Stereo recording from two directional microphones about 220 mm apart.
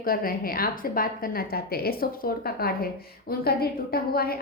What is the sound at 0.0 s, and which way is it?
A woman's voice, 40° left (ahead or behind).